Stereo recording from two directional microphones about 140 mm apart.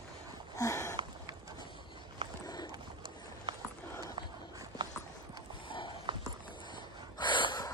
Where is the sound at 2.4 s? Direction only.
30° left (ahead or behind).